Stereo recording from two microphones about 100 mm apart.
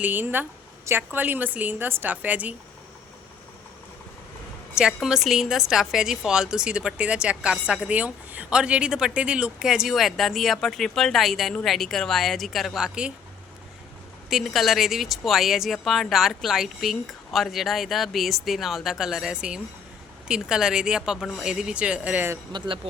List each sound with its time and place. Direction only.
0.0 s a woman's voice: 20° right (ahead or behind)
4.7 s a woman's voice: 5° right (ahead or behind)
14.3 s a woman's voice: centre (ahead or behind)
22.5 s speech: 50° right (ahead or behind)